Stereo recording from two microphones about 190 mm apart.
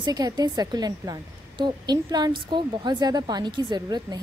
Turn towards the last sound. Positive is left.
turn(degrees=-20)  # may be behind; listen again after turning